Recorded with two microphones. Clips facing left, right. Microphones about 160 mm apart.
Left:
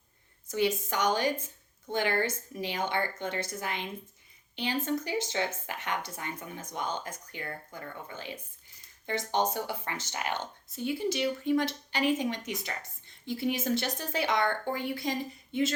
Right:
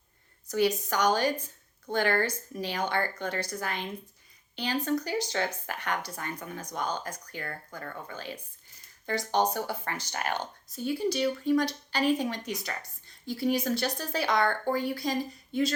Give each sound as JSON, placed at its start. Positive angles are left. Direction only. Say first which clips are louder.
{"t": 0.5, "sound": "a woman's voice", "louder": "right 2 dB", "side_deg": 20}